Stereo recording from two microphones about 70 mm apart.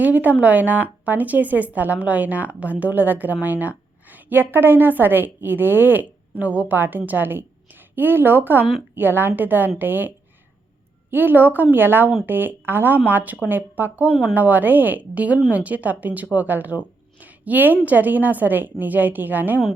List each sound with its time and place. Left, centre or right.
0.0 s a woman's voice: right
11.1 s speech: right